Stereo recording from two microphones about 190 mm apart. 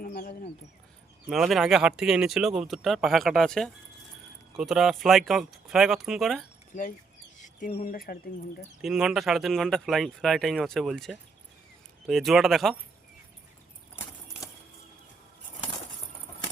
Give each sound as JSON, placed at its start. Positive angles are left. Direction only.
{"t": 0.0, "sound": "speech", "side_deg": 50}
{"t": 1.3, "sound": "speech", "side_deg": 0}
{"t": 7.3, "sound": "bird", "side_deg": 40}
{"t": 7.9, "sound": "speech", "side_deg": 50}
{"t": 8.8, "sound": "speech", "side_deg": 0}